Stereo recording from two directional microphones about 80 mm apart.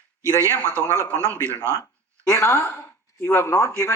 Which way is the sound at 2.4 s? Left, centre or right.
Left.